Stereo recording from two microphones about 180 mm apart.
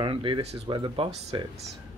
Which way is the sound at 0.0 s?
25° right (ahead or behind).